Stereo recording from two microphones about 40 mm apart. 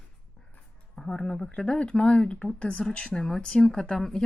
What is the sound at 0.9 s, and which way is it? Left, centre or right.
Speech, centre.